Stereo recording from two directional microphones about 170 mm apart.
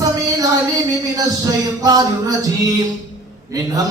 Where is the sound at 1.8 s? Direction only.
20° right (ahead or behind).